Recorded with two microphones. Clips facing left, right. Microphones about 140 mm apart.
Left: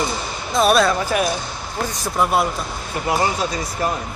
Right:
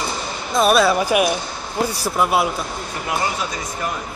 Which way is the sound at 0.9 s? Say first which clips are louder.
Right 3 dB; 10° right (ahead or behind).